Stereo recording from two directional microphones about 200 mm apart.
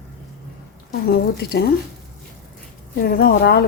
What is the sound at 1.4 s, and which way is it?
Speech, 50° left (ahead or behind).